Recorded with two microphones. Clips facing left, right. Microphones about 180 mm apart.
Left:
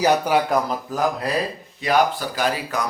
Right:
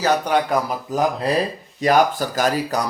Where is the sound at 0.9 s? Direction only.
20° right (ahead or behind).